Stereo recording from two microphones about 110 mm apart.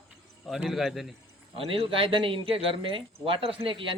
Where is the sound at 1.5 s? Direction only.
55° right (ahead or behind).